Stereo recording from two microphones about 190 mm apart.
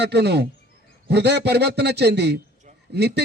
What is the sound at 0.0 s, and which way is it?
A man's voice, 60° right (ahead or behind).